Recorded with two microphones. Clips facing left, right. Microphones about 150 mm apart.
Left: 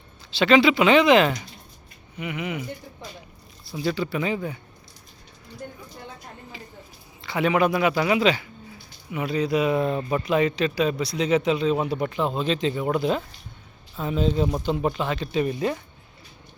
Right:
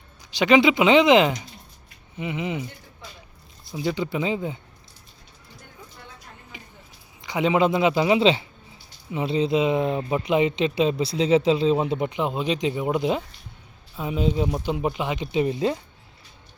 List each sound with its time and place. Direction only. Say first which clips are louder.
0.3 s speech: even; 15° right (ahead or behind)
3.7 s speech: even; 20° right (ahead or behind)
6.5 s a sound: left 3 dB; 20° right (ahead or behind)
7.2 s speech: right 1 dB; 15° right (ahead or behind)